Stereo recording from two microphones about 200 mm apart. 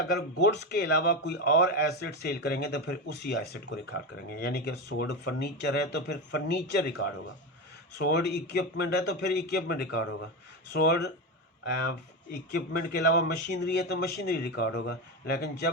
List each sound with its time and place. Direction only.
0.0 s a man's voice: 55° left (ahead or behind)
7.9 s a man's voice: 55° left (ahead or behind)
10.7 s speech: 55° left (ahead or behind)
12.5 s a man's voice: 55° left (ahead or behind)